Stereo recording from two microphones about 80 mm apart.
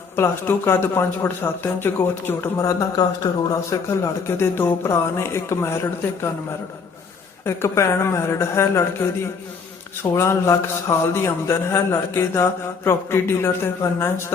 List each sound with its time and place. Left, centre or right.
0.2 s speech: left
2.6 s speech: left
3.0 s speech: left
3.7 s a man's voice: left
7.4 s a man's voice: left
10.0 s a man's voice: left